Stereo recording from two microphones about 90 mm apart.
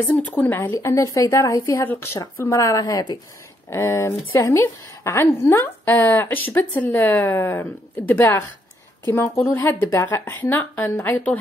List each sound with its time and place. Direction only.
0.1 s a woman's voice: 20° left (ahead or behind)
0.7 s speech: 35° left (ahead or behind)
3.7 s a woman's voice: 30° left (ahead or behind)
9.0 s a woman's voice: 30° left (ahead or behind)